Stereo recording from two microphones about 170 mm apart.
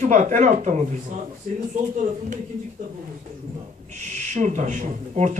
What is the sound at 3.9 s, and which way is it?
Speech, 45° right (ahead or behind).